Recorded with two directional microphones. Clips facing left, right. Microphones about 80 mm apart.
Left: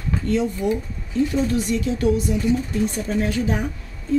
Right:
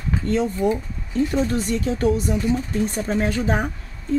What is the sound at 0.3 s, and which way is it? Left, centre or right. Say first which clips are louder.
Speech: right 1 dB; right.